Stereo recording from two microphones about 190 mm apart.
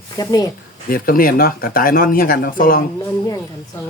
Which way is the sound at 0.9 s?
50° left (ahead or behind).